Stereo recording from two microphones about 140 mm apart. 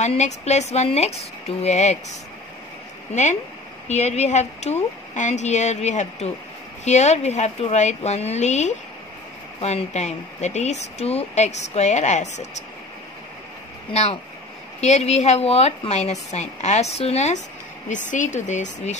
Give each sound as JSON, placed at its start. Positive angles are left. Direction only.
{"t": 0.0, "sound": "speech", "side_deg": 55}
{"t": 3.1, "sound": "speech", "side_deg": 55}
{"t": 13.9, "sound": "speech", "side_deg": 50}
{"t": 17.8, "sound": "speech", "side_deg": 65}